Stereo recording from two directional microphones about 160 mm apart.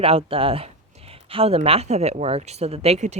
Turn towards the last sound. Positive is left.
turn(degrees=-45)  # may be behind; listen again after turning